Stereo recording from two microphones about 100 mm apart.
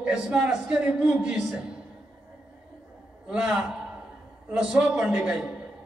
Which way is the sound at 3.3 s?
5° right (ahead or behind).